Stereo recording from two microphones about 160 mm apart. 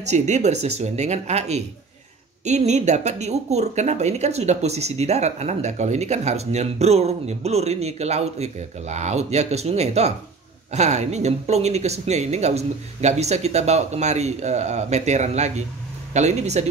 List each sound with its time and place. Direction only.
0.0 s speech: 45° right (ahead or behind)